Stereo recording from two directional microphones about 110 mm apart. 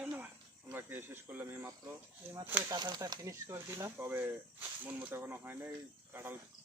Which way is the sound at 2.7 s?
40° right (ahead or behind).